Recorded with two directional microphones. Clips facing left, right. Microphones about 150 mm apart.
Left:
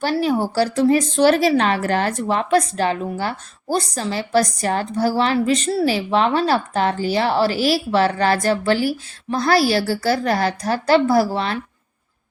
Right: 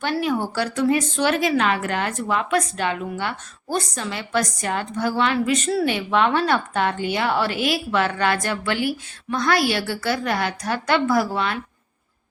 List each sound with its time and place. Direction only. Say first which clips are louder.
0.0 s a woman's voice: left 4 dB; 35° left (ahead or behind)